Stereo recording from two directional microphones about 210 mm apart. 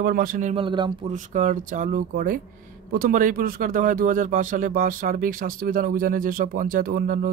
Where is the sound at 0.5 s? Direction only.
25° right (ahead or behind).